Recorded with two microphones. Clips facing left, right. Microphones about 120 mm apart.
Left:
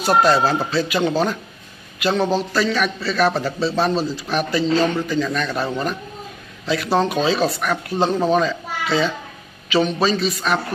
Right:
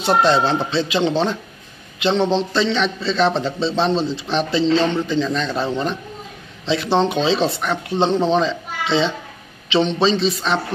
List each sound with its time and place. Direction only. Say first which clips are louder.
0.0 s a man's voice: even; 25° right (ahead or behind)